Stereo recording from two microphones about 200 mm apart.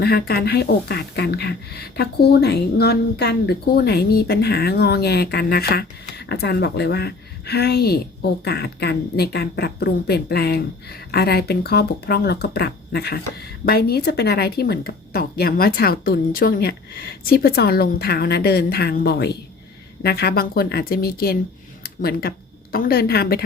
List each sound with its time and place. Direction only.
0.0 s speech: 50° left (ahead or behind)